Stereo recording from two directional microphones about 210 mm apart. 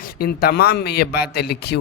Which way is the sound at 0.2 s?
45° left (ahead or behind).